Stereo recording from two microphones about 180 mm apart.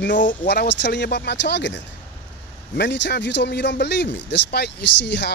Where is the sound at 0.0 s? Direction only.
85° left.